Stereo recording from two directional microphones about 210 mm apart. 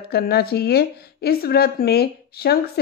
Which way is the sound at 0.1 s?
50° left (ahead or behind).